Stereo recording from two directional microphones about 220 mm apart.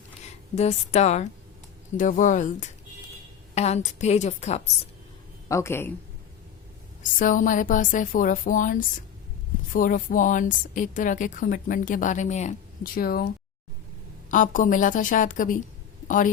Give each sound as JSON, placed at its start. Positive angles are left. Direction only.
{"t": 0.5, "sound": "a woman's voice", "side_deg": 30}
{"t": 5.5, "sound": "a woman's voice", "side_deg": 10}
{"t": 7.0, "sound": "a woman's voice", "side_deg": 35}